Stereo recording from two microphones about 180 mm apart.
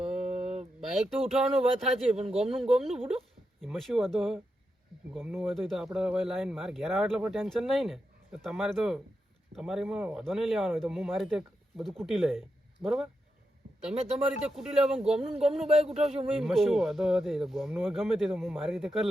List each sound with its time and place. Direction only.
0.1 s mantra: 35° right (ahead or behind)
0.8 s a sound: centre (ahead or behind)
1.3 s speech: centre (ahead or behind)
5.4 s speech: centre (ahead or behind)
14.4 s speech: 5° right (ahead or behind)